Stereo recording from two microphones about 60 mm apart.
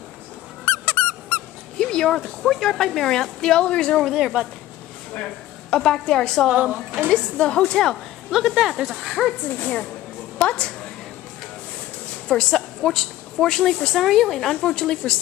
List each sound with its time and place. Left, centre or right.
0.7 s squeak: left
1.8 s a woman's voice: centre
4.1 s speech: centre
5.7 s a woman's voice: centre
6.5 s speech: right
7.1 s a woman's voice: centre
8.3 s speech: centre
10.4 s a sound: centre
12.3 s a woman's voice: centre